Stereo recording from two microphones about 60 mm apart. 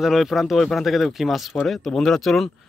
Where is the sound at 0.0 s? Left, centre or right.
Centre.